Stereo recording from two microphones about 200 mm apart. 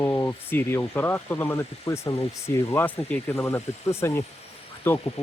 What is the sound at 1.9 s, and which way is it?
Speech, 25° left (ahead or behind).